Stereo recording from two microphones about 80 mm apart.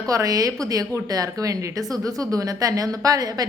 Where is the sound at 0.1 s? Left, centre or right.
Right.